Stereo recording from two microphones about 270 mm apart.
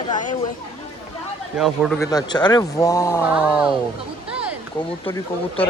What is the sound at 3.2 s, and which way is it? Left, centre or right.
Speech, centre.